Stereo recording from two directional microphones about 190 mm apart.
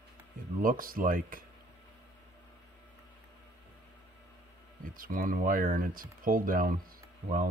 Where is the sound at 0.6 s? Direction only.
45° right (ahead or behind).